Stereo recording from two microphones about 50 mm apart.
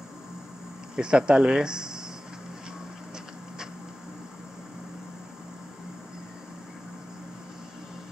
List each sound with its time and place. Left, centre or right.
0.9 s speech: centre